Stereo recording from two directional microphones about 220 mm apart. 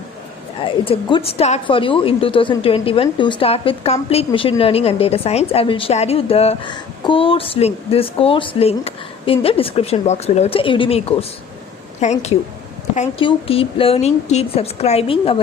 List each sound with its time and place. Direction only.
0.6 s a woman's voice: 25° left (ahead or behind)